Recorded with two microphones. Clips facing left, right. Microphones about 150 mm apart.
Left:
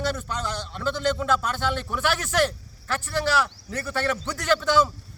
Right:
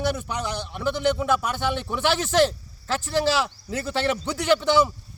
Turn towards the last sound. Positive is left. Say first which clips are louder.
# right 2 dB
turn(degrees=-20)  # may be behind; listen again after turning